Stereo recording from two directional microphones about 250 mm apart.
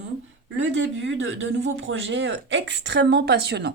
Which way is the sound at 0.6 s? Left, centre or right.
Right.